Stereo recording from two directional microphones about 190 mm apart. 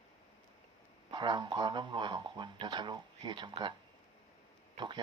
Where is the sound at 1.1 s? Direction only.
25° right (ahead or behind).